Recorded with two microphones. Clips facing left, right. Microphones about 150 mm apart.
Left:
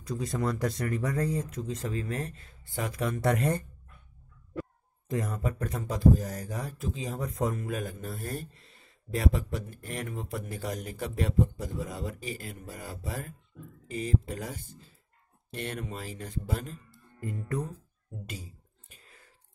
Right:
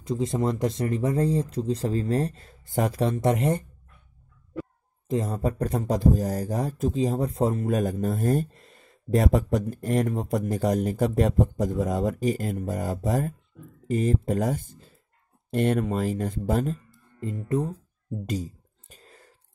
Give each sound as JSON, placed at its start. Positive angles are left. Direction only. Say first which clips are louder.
{"t": 0.0, "sound": "speech", "louder": "right 6 dB", "side_deg": -25}
{"t": 17.2, "sound": "speech", "louder": "right 7 dB", "side_deg": -25}
{"t": 18.2, "sound": "a sound", "louder": "right 14 dB", "side_deg": -40}